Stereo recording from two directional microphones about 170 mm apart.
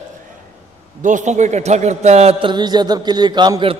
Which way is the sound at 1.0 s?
45° right (ahead or behind).